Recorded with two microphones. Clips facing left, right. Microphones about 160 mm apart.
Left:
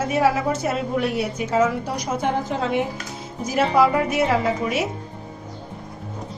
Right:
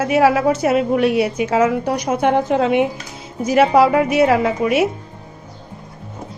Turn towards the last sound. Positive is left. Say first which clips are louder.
# right 5 dB
turn(degrees=-65)  # may be behind; listen again after turning